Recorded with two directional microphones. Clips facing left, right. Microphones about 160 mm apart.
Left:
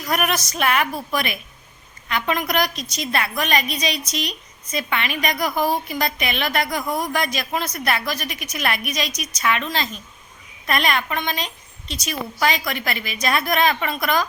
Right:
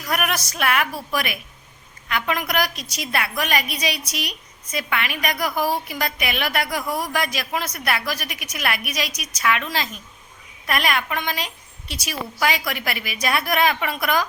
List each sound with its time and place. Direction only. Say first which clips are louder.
0.1 s a woman's voice: left 2 dB; 5° right (ahead or behind)